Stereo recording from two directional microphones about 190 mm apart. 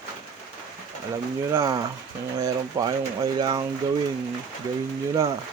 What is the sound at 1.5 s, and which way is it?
Speech, 15° right (ahead or behind).